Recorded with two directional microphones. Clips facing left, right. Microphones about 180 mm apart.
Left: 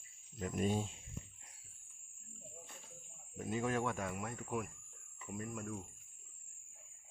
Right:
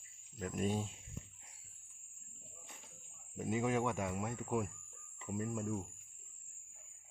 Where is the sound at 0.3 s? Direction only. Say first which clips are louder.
Left 1 dB; centre (ahead or behind).